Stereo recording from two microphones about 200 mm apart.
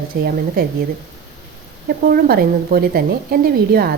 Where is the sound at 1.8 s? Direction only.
50° right (ahead or behind).